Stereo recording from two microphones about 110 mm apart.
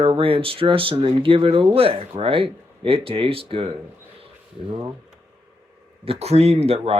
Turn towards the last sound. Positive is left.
turn(degrees=-65)  # may be behind; listen again after turning